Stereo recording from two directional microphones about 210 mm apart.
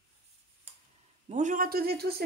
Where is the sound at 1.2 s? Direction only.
35° right (ahead or behind).